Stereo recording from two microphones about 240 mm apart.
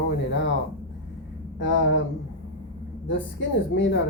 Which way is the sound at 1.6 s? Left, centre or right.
Left.